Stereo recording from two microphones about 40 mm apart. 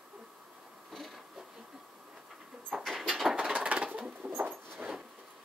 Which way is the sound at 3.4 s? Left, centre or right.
Centre.